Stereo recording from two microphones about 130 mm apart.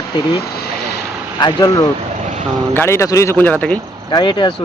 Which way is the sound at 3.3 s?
10° left (ahead or behind).